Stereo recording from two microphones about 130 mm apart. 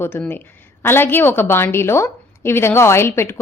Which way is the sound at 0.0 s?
15° left (ahead or behind).